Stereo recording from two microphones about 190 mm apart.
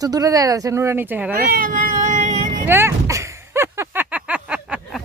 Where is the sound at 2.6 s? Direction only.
15° right (ahead or behind).